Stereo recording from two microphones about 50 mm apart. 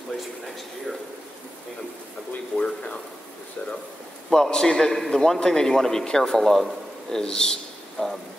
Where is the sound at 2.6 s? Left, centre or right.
Left.